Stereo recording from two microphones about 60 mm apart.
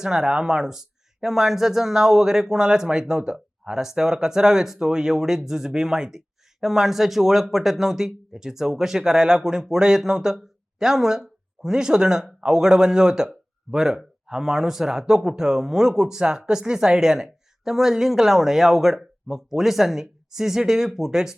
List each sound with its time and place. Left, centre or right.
0.0 s a woman's voice: centre